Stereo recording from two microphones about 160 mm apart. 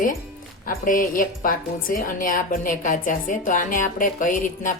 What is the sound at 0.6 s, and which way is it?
A woman's voice, 60° left (ahead or behind).